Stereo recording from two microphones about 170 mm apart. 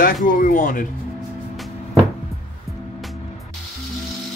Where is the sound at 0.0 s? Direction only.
50° left (ahead or behind).